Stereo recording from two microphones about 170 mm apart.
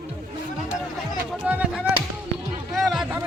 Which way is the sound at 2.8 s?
Centre (ahead or behind).